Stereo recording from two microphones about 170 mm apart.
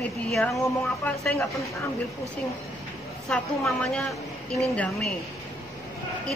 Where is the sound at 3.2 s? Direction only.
5° left (ahead or behind).